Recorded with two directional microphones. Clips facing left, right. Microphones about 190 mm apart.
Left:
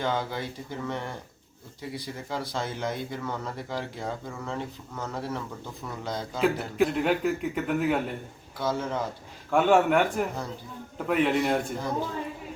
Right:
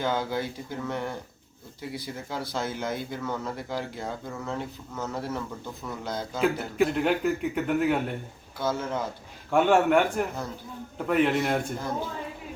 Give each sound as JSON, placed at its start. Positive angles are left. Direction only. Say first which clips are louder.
{"t": 0.0, "sound": "speech", "louder": "right 1 dB", "side_deg": -5}